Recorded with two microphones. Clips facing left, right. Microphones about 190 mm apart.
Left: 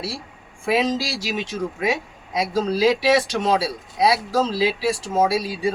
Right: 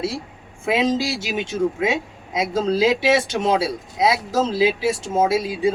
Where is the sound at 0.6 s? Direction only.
20° right (ahead or behind).